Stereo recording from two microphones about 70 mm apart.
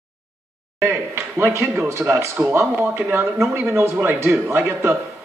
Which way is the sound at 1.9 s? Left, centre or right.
Right.